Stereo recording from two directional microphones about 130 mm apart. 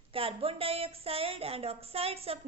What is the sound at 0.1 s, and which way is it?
Speech, 45° right (ahead or behind).